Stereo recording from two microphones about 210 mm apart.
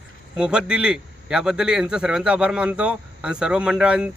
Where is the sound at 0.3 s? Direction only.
5° right (ahead or behind).